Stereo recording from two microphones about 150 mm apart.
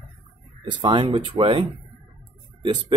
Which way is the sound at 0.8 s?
40° right (ahead or behind).